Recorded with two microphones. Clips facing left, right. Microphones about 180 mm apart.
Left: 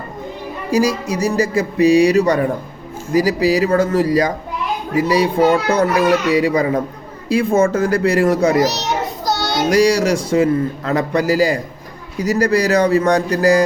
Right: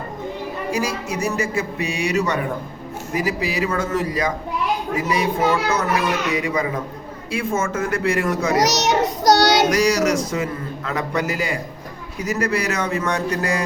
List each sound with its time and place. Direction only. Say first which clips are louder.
0.7 s a man's voice: left 9 dB; 35° left (ahead or behind)
8.6 s child singing: right 1 dB; 75° right (ahead or behind)
9.6 s a man's voice: left 4 dB; 30° left (ahead or behind)